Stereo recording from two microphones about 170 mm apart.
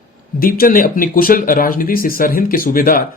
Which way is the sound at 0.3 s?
60° left (ahead or behind).